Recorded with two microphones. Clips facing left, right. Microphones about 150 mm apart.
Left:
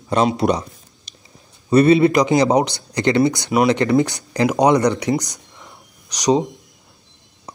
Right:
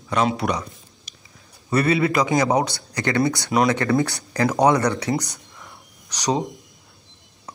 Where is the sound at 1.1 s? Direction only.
30° left (ahead or behind).